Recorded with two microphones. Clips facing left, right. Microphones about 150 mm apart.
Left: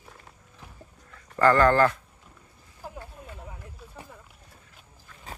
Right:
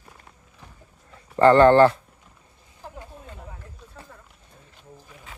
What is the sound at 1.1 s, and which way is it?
Speech, 25° right (ahead or behind).